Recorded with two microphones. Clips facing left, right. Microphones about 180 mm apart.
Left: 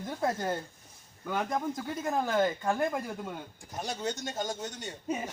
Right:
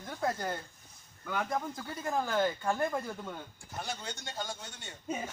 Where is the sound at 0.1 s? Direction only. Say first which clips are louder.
Left 3 dB; 25° left (ahead or behind).